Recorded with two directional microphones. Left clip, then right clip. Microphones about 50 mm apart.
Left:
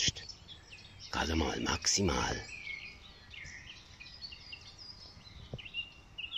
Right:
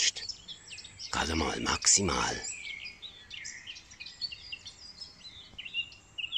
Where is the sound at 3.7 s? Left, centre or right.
Right.